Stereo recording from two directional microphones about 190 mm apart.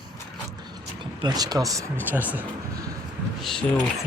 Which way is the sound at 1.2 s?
20° right (ahead or behind).